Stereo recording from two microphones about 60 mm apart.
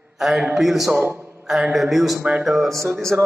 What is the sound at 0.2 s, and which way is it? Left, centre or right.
A man's voice, centre.